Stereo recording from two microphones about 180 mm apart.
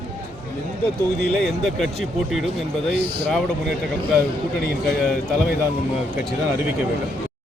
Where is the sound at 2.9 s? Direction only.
60° right (ahead or behind).